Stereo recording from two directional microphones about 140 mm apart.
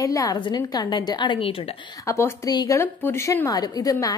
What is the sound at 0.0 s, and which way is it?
A woman's voice, 25° left (ahead or behind).